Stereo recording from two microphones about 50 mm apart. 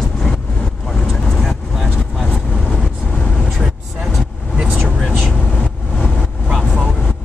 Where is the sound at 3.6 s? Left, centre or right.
Centre.